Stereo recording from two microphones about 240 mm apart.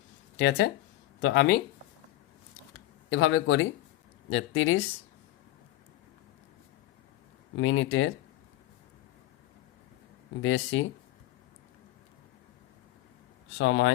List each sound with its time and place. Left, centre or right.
0.3 s speech: left
3.1 s speech: left
7.5 s speech: left
10.4 s speech: left
13.6 s speech: left